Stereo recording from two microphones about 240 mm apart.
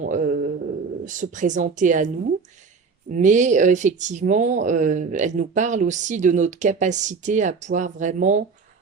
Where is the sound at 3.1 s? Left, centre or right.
Right.